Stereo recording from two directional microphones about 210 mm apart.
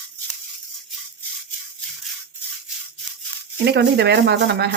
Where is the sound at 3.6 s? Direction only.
55° right (ahead or behind).